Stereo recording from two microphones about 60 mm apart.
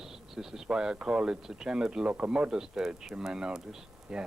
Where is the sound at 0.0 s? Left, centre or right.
Centre.